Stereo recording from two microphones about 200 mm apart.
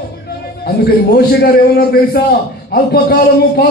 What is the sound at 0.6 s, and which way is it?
A man's voice, 50° left (ahead or behind).